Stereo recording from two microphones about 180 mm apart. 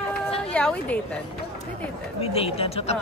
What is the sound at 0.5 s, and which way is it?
Speech, 5° left (ahead or behind).